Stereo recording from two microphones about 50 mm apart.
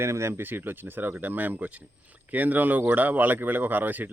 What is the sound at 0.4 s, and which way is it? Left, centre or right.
Speech, right.